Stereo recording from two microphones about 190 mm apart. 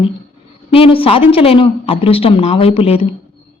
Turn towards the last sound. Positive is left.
turn(degrees=30)  # may be behind; listen again after turning